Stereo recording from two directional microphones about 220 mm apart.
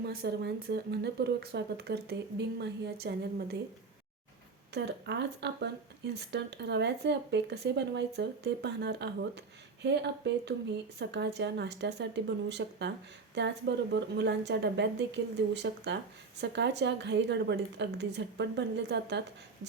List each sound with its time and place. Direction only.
0.0 s speech: 45° right (ahead or behind)
4.7 s speech: 50° right (ahead or behind)